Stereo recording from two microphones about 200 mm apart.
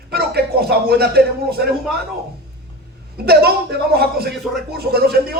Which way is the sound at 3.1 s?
50° right (ahead or behind).